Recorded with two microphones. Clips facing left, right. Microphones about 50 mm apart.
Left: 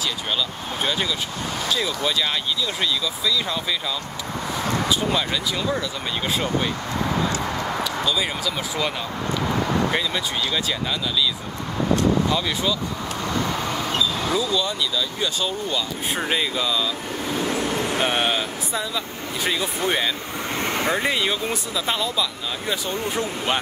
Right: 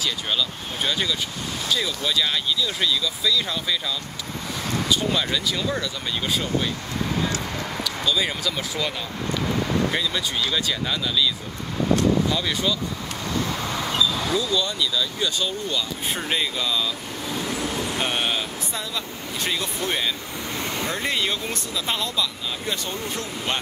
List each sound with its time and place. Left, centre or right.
0.0 s speech: centre
4.8 s speech: centre
6.3 s speech: left
7.3 s a sound: left
8.1 s speech: centre
9.9 s speech: centre
12.3 s speech: centre
13.9 s speech: centre
17.5 s vehicle: left
17.9 s speech: centre
20.5 s vehicle: left
21.1 s speech: centre
23.1 s speech: centre